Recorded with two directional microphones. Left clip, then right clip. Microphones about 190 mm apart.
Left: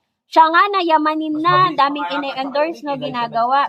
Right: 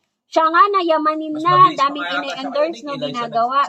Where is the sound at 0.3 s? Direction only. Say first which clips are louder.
Left 1 dB; 20° left (ahead or behind).